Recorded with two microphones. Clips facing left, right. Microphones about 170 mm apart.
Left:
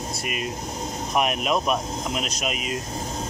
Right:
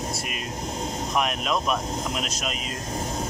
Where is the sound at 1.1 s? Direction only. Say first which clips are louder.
Left 3 dB; 10° left (ahead or behind).